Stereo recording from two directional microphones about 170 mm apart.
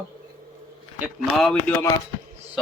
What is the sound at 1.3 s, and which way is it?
Speech, 5° left (ahead or behind).